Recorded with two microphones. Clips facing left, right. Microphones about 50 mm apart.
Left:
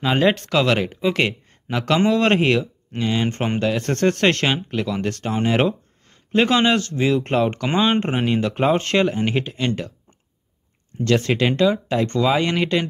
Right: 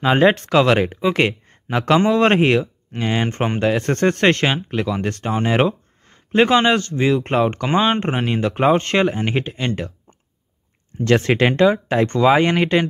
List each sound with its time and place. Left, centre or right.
0.0 s speech: right
3.0 s speech: right
3.3 s speech: centre
11.1 s speech: right